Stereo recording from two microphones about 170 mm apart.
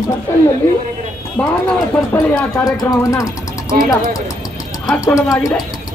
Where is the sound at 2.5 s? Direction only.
20° left (ahead or behind).